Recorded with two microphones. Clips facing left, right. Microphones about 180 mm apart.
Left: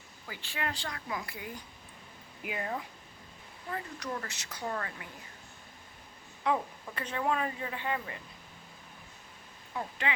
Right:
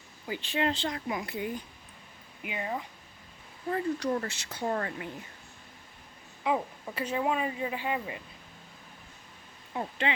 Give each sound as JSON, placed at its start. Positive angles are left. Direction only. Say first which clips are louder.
{"t": 0.3, "sound": "speech", "louder": "right 8 dB", "side_deg": -20}
{"t": 2.4, "sound": "speech", "louder": "right 1 dB", "side_deg": 0}
{"t": 3.7, "sound": "speech", "louder": "right 9 dB", "side_deg": -35}
{"t": 6.4, "sound": "speech", "louder": "right 1 dB", "side_deg": -10}
{"t": 9.7, "sound": "speech", "louder": "right 3 dB", "side_deg": -25}